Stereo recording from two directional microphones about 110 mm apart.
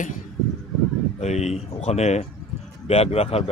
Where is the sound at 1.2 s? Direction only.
90° left.